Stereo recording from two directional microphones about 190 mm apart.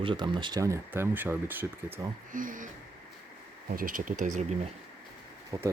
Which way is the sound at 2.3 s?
45° right (ahead or behind).